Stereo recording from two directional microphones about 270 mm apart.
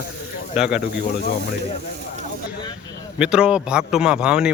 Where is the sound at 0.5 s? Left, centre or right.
Centre.